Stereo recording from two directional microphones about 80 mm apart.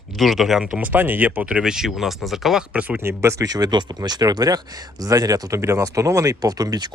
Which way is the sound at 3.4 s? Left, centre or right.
Right.